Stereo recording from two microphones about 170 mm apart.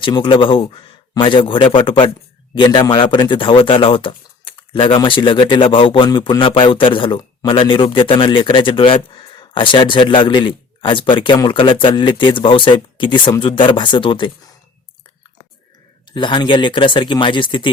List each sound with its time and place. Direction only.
0.0 s speech: 30° left (ahead or behind)
16.1 s speech: 25° left (ahead or behind)